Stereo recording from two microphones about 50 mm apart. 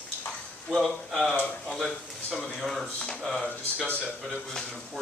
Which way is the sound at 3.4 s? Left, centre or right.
Left.